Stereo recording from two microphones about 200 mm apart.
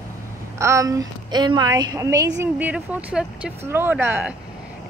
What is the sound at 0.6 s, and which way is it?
Speech, 15° right (ahead or behind).